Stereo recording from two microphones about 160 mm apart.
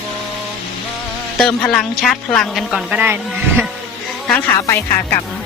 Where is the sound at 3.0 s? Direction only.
10° right (ahead or behind).